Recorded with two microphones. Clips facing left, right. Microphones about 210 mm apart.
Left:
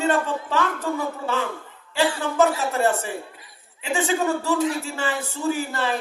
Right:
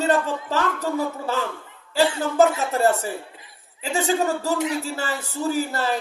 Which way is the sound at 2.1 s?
25° right (ahead or behind).